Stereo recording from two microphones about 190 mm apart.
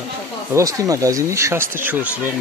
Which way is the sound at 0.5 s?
15° right (ahead or behind).